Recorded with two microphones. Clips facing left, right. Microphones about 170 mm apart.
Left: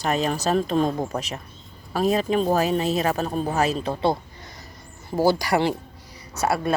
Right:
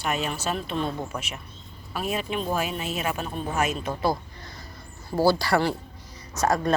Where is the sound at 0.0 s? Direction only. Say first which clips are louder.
Left 5 dB; 35° left (ahead or behind).